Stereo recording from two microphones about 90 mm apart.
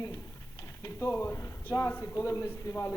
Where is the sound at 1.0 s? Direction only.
30° left (ahead or behind).